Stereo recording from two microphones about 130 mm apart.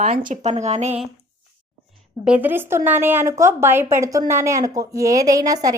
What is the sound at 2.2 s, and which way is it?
Speech, 10° right (ahead or behind).